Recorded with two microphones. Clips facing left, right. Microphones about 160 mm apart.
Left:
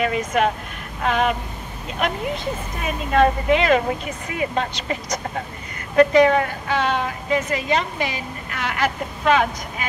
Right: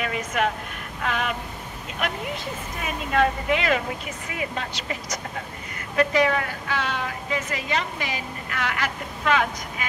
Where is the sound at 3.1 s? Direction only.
30° left (ahead or behind).